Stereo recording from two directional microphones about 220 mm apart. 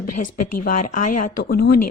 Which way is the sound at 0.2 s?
40° left (ahead or behind).